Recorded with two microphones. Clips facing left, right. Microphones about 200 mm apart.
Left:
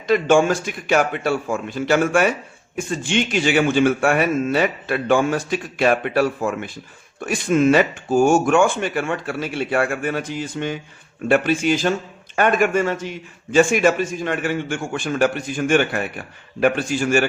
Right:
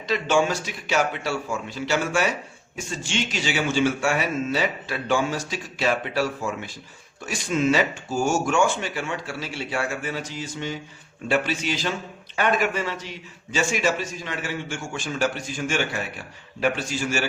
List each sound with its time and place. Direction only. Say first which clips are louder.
0.1 s a man's voice: left 6 dB; 50° left (ahead or behind)